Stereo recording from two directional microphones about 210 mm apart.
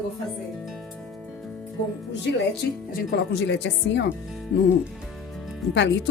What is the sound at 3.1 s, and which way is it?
Speech, 55° left (ahead or behind).